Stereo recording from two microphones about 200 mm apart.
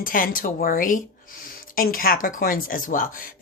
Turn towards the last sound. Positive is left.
turn(degrees=45)  # may be behind; listen again after turning